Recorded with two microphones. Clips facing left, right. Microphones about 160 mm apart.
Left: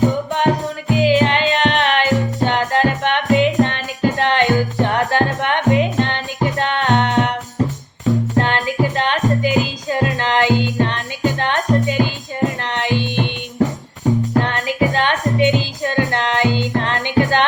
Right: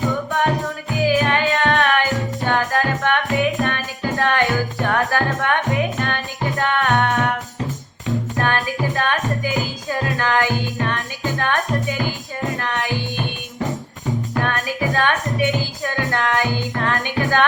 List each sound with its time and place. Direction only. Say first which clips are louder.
0.1 s music: left 3 dB; 20° left (ahead or behind)
8.4 s music: left 4 dB; 20° left (ahead or behind)
14.3 s music: left 5 dB; 25° left (ahead or behind)